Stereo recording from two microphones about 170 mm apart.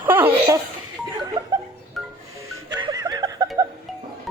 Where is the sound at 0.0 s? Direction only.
10° right (ahead or behind).